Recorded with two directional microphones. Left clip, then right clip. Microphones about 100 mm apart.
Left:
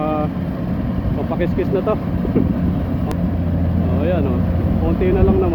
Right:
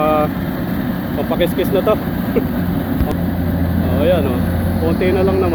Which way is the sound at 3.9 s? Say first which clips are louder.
Right 6 dB; 15° left (ahead or behind).